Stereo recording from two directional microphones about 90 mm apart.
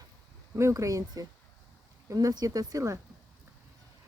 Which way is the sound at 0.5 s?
35° right (ahead or behind).